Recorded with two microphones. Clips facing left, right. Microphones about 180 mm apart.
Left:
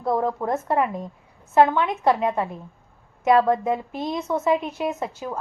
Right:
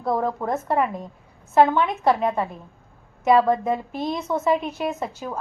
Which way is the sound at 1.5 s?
10° right (ahead or behind).